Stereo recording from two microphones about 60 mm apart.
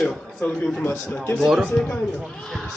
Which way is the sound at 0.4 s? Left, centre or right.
Left.